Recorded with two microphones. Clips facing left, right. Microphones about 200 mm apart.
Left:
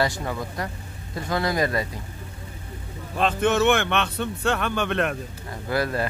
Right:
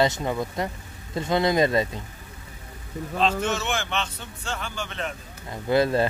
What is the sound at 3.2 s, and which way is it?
Speech, 55° left (ahead or behind).